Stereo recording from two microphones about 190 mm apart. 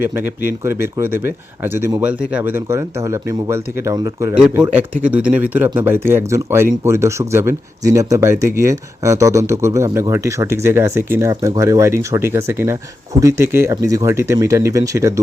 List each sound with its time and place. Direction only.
0.0 s speech: 10° right (ahead or behind)
4.4 s speech: 5° right (ahead or behind)